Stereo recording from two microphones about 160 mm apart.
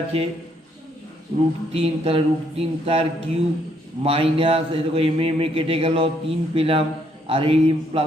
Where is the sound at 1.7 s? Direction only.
35° right (ahead or behind).